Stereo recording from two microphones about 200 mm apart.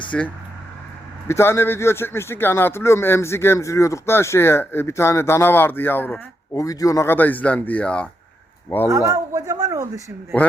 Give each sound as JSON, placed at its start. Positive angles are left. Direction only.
{"t": 0.1, "sound": "speech", "side_deg": 5}
{"t": 1.3, "sound": "speech", "side_deg": 10}
{"t": 8.9, "sound": "a man's voice", "side_deg": -15}